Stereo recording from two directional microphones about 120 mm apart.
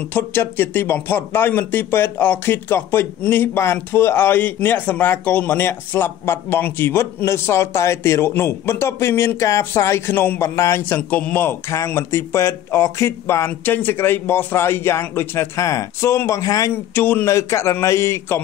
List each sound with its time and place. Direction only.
0.1 s speech: 15° left (ahead or behind)